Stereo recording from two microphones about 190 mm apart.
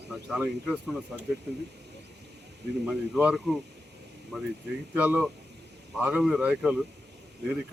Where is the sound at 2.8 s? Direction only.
5° right (ahead or behind).